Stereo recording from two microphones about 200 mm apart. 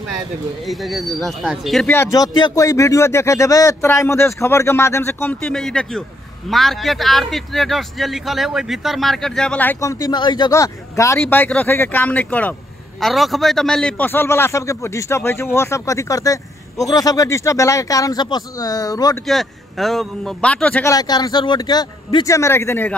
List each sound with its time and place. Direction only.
0.7 s speech: centre (ahead or behind); by 19.1 s 20° left (ahead or behind)
19.2 s speech: centre (ahead or behind)